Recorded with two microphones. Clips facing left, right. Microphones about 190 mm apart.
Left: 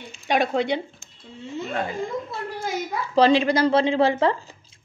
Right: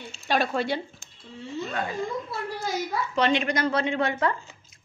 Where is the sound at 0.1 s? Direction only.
20° left (ahead or behind).